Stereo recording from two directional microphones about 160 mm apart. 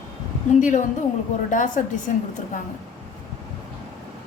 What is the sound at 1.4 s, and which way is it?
Speech, 55° left (ahead or behind).